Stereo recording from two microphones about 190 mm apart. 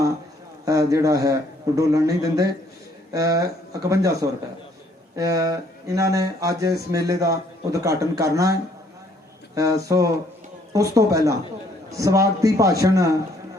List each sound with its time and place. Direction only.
0.6 s speech: 15° right (ahead or behind)
9.6 s speech: 15° right (ahead or behind)